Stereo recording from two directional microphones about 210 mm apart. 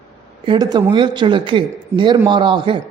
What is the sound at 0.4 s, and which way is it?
A man's voice, 20° right (ahead or behind).